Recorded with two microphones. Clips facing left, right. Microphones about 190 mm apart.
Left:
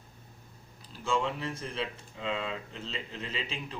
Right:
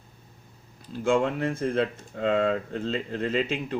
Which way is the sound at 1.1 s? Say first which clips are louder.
Right 6 dB; 55° right (ahead or behind).